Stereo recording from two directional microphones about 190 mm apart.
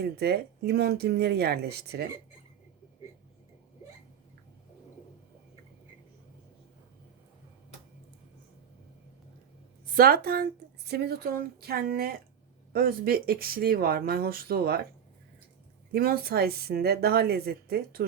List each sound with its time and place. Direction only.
0.0 s speech: 55° right (ahead or behind)
9.9 s speech: 50° right (ahead or behind)
15.9 s speech: 50° right (ahead or behind)